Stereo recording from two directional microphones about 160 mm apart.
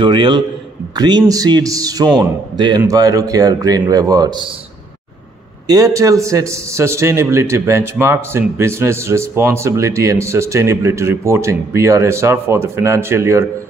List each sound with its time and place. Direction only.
0.0 s a man's voice: 30° right (ahead or behind)
5.7 s a man's voice: 20° right (ahead or behind)